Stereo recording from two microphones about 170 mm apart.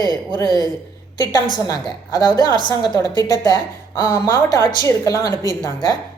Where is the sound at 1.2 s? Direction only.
25° left (ahead or behind).